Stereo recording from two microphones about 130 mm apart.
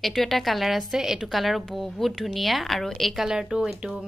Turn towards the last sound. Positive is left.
turn(degrees=-5)  # may be behind; listen again after turning